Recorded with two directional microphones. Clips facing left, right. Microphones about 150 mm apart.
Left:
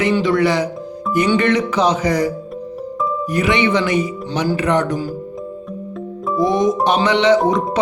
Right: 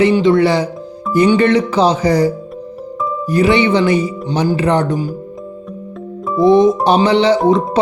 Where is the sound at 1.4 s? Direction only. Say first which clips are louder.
Right 4 dB; 30° right (ahead or behind).